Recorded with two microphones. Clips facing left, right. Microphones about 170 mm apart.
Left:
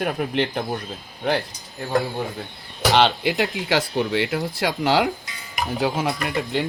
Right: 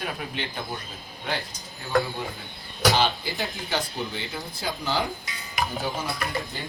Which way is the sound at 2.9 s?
75° left (ahead or behind).